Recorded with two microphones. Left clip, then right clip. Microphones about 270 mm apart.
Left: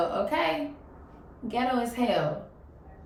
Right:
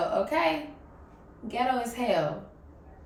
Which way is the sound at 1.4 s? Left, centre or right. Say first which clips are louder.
Even; centre.